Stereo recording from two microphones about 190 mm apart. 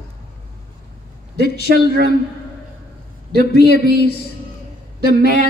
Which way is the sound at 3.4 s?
60° left (ahead or behind).